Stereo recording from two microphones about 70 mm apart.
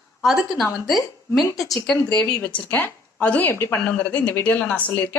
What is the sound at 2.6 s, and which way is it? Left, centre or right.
A woman's voice, left.